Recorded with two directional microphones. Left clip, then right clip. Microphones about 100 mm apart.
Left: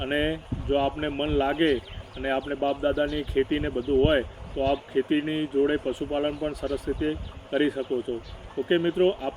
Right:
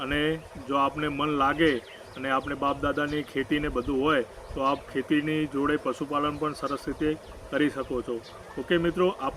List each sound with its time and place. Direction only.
0.0 s speech: 20° right (ahead or behind)